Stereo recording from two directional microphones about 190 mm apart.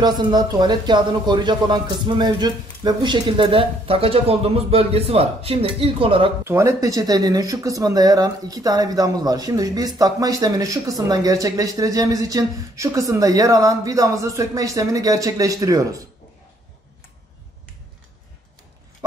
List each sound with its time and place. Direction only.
0.0 s a man's voice: 20° right (ahead or behind)
6.4 s speech: 15° right (ahead or behind)